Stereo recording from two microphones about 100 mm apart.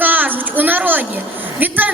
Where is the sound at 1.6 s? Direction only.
20° right (ahead or behind).